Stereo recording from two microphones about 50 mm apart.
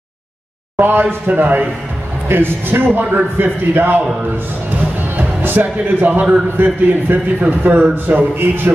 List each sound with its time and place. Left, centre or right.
0.7 s a man's voice: right
2.2 s a man's voice: right
5.1 s a man's voice: right